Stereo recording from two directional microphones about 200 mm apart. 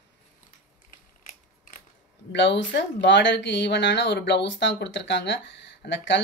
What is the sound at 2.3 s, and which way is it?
Speech, 60° left (ahead or behind).